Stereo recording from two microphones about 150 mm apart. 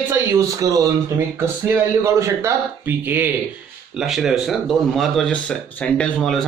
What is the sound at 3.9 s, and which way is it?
Speech, centre (ahead or behind).